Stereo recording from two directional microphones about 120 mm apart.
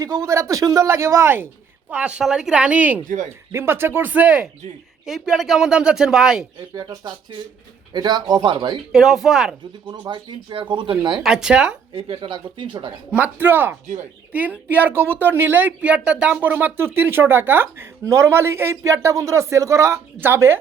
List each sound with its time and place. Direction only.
0.0 s speech: 25° right (ahead or behind)
1.9 s a woman's voice: 10° right (ahead or behind)
3.0 s speech: 90° right
3.2 s speech: 20° right (ahead or behind); by 6.4 s 5° right (ahead or behind)
6.7 s speech: 35° right (ahead or behind)
8.9 s speech: 5° right (ahead or behind)
9.8 s speech: 40° right (ahead or behind)
11.2 s speech: 5° right (ahead or behind)
11.9 s speech: 50° right (ahead or behind)
13.1 s a woman's voice: 15° right (ahead or behind)